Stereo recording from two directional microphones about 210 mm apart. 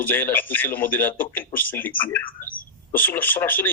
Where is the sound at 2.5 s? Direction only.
40° left (ahead or behind).